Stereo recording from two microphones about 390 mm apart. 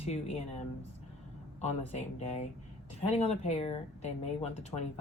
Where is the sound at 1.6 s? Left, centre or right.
Centre.